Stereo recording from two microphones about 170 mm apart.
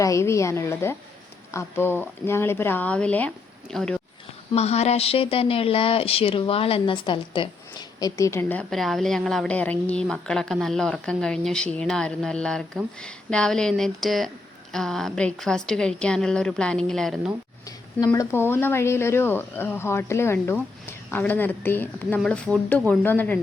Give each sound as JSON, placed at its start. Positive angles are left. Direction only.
{"t": 0.0, "sound": "speech", "side_deg": 15}
{"t": 4.5, "sound": "speech", "side_deg": 40}
{"t": 17.7, "sound": "speech", "side_deg": 20}